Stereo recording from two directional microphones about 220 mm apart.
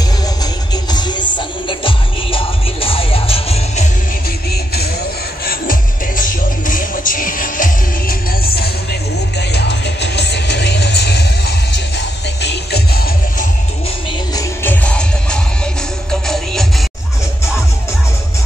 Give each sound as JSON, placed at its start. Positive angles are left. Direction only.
{"t": 0.9, "sound": "music", "side_deg": 20}
{"t": 5.4, "sound": "music", "side_deg": 40}
{"t": 14.3, "sound": "music", "side_deg": 10}
{"t": 16.1, "sound": "music", "side_deg": 0}